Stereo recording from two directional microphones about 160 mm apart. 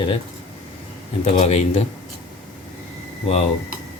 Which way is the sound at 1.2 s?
40° left (ahead or behind).